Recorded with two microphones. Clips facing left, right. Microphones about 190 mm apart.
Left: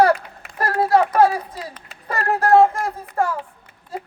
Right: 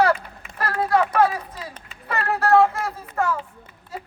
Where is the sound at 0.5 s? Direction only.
40° left (ahead or behind).